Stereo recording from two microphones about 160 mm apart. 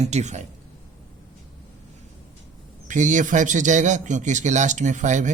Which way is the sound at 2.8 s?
50° right (ahead or behind).